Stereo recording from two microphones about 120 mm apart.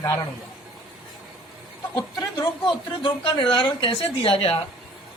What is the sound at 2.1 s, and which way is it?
A woman's voice, 35° left (ahead or behind).